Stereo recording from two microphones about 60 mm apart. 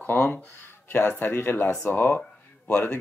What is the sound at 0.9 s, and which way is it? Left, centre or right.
Speech, left.